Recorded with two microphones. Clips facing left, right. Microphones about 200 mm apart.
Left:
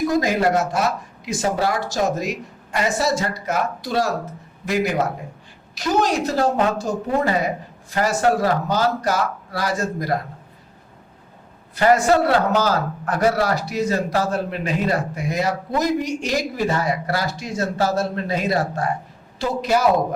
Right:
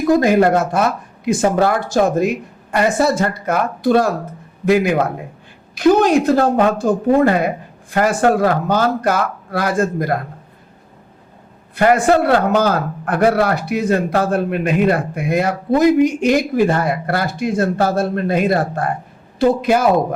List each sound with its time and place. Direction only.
0.1 s a man's voice: 55° right (ahead or behind)
11.7 s a man's voice: 55° right (ahead or behind)